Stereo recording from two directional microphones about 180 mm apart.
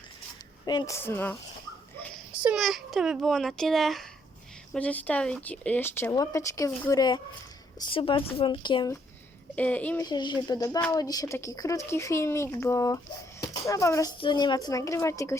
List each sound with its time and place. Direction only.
0.6 s speech: 25° left (ahead or behind)
2.3 s a woman's voice: 5° right (ahead or behind); by 9.0 s 25° left (ahead or behind)
9.6 s speech: 10° left (ahead or behind)
10.1 s a woman's voice: 25° left (ahead or behind)